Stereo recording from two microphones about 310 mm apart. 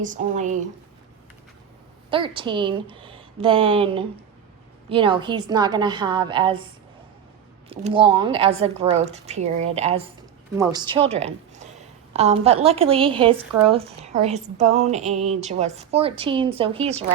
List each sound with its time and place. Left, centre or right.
0.0 s a woman's voice: right
2.0 s a woman's voice: centre
7.7 s a woman's voice: centre